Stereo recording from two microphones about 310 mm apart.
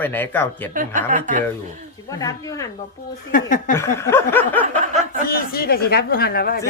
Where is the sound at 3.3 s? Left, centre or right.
Left.